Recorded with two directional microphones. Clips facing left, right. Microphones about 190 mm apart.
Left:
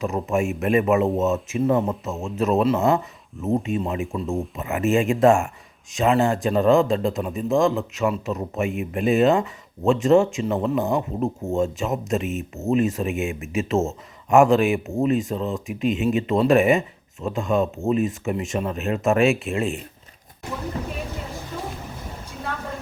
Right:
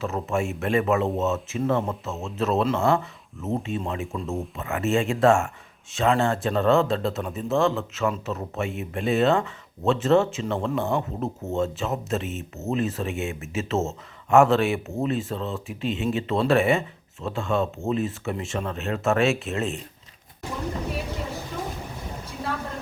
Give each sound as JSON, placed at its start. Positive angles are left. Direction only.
{"t": 0.0, "sound": "speech", "side_deg": 15}